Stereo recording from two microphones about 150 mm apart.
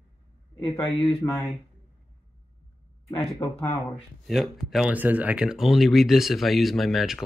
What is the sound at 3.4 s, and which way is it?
Speech, 25° left (ahead or behind).